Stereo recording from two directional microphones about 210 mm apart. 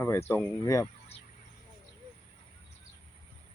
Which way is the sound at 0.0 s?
10° left (ahead or behind).